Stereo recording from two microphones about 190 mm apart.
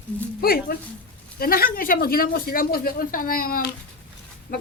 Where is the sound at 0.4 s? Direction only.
55° left (ahead or behind).